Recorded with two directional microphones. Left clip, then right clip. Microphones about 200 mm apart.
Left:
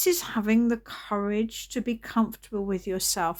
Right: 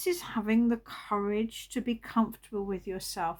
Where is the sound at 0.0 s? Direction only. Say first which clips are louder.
Left 6 dB; 45° left (ahead or behind).